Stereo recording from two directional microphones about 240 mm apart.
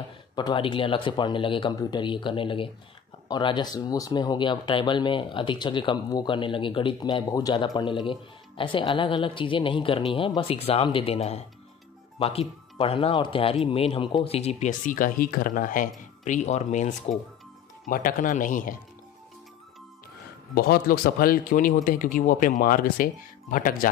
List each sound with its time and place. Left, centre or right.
0.4 s a man's voice: centre
20.5 s a man's voice: left